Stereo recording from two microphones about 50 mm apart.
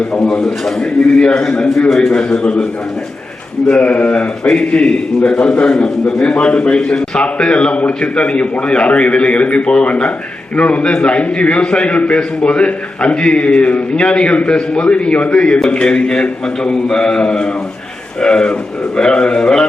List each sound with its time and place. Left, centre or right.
0.4 s a man's voice: centre
1.3 s a man's voice: centre
3.7 s a man's voice: left
4.4 s a man's voice: centre
15.4 s a man's voice: centre